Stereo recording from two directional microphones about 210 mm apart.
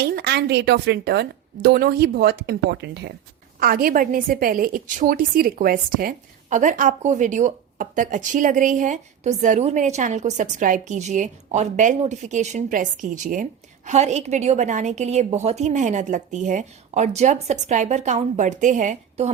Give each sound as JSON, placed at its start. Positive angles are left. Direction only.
{"t": 0.0, "sound": "a woman's voice", "side_deg": -50}